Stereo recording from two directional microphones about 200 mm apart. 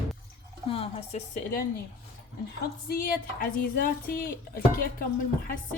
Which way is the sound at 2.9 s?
45° left (ahead or behind).